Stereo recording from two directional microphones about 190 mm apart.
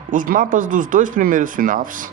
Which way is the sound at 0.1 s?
45° right (ahead or behind).